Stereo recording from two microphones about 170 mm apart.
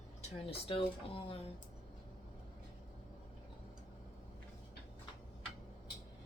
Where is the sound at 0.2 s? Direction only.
35° left (ahead or behind).